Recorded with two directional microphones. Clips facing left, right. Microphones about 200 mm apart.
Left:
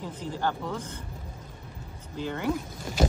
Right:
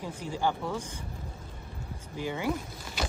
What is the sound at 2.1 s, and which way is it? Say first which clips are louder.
Speech: left 2 dB; 10° right (ahead or behind).